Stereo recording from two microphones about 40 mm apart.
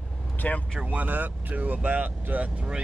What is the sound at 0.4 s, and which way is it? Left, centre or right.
Speech, left.